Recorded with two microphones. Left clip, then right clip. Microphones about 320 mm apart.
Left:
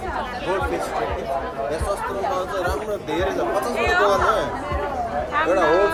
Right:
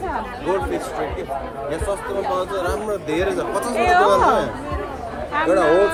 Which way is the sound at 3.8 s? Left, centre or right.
Centre.